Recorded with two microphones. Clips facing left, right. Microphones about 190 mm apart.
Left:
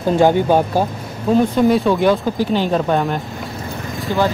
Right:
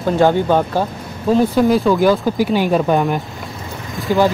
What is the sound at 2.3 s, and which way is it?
Speech, 10° right (ahead or behind).